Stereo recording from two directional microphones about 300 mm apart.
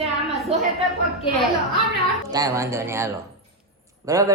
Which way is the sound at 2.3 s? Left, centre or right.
Centre.